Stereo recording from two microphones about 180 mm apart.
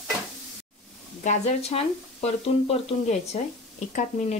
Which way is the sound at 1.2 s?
35° left (ahead or behind).